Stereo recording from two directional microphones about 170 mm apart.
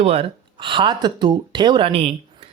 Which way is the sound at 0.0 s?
35° right (ahead or behind).